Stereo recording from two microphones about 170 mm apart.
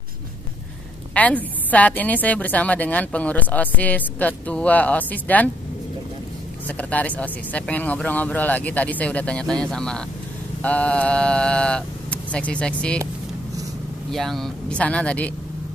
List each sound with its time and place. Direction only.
1.1 s a woman's voice: 10° left (ahead or behind)
6.8 s a woman's voice: 10° left (ahead or behind)
14.1 s a woman's voice: centre (ahead or behind)